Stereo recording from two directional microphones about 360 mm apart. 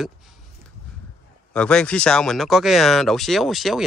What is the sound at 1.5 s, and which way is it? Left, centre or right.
Speech, centre.